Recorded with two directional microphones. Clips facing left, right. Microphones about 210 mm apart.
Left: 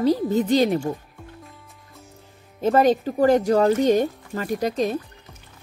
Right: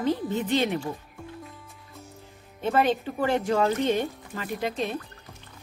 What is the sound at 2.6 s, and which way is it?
A woman's voice, 40° left (ahead or behind).